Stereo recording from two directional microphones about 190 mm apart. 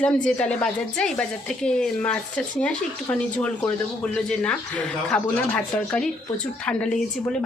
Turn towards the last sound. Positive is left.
turn(degrees=5)  # may be behind; listen again after turning